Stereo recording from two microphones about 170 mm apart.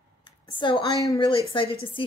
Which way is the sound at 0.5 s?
30° left (ahead or behind).